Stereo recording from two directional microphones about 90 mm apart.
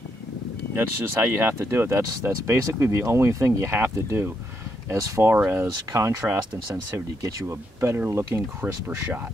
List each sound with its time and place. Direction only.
0.7 s speech: 25° right (ahead or behind)
5.3 s speech: 25° right (ahead or behind)